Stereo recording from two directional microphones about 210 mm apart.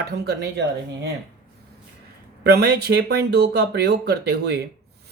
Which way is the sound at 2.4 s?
50° right (ahead or behind).